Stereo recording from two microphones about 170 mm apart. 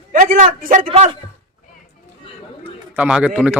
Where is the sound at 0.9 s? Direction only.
35° right (ahead or behind).